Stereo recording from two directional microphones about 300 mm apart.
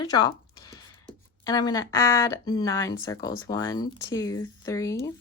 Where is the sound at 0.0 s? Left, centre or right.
Centre.